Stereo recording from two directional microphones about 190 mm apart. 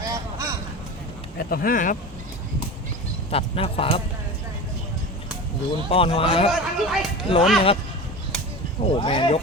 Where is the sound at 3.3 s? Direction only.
30° left (ahead or behind).